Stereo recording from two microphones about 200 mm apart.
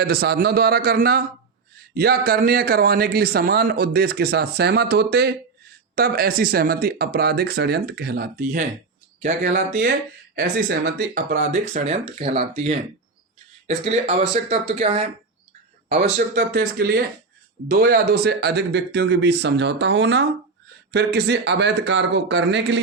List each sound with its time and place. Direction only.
0.0 s a man's voice: 50° right (ahead or behind)
9.6 s a man's voice: 45° right (ahead or behind); by 15.1 s 30° right (ahead or behind)
15.9 s a man's voice: 40° right (ahead or behind); by 22.8 s 60° right (ahead or behind)